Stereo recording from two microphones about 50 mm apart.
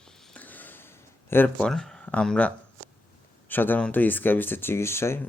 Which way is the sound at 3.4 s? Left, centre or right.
Left.